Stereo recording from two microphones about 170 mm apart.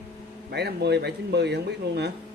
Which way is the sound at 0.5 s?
75° right (ahead or behind).